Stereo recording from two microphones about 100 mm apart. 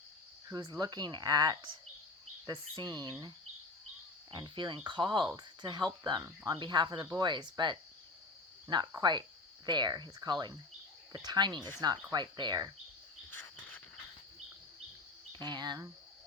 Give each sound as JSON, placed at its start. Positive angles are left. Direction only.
{"t": 0.4, "sound": "speech", "side_deg": -40}
{"t": 4.3, "sound": "speech", "side_deg": -50}
{"t": 6.2, "sound": "speech", "side_deg": -30}
{"t": 6.6, "sound": "speech", "side_deg": -50}
{"t": 9.0, "sound": "speech", "side_deg": -45}
{"t": 13.6, "sound": "cricket", "side_deg": 15}
{"t": 15.3, "sound": "speech", "side_deg": -50}